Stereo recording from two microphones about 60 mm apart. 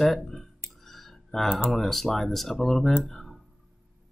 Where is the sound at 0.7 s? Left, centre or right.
Centre.